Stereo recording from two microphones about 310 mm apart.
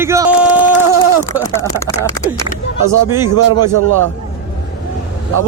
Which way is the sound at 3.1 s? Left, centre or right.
Centre.